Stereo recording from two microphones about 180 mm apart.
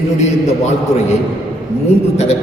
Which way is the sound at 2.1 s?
35° left (ahead or behind).